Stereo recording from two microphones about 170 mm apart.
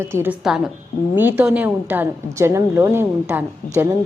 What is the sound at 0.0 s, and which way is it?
A woman's voice, 15° right (ahead or behind).